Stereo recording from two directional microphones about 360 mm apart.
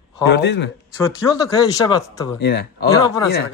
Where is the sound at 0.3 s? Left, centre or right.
Left.